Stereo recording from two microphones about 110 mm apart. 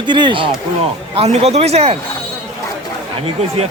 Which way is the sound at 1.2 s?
70° right (ahead or behind).